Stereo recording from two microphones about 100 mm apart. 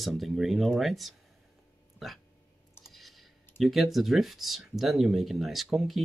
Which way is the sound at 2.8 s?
Centre (ahead or behind).